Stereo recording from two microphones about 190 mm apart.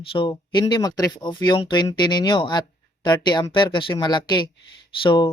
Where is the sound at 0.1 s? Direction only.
25° left (ahead or behind).